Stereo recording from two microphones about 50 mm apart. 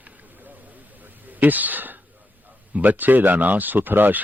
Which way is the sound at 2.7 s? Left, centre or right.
Right.